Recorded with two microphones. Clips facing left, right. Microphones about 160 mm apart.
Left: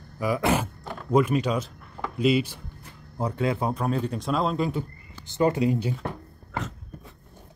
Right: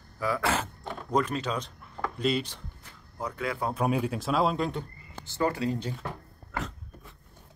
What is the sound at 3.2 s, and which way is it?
Speech, 30° left (ahead or behind).